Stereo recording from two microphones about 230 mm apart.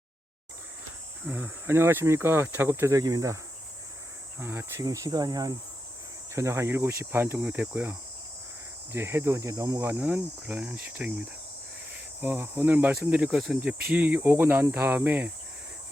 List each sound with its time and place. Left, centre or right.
1.3 s speech: centre
4.4 s speech: centre
12.2 s speech: centre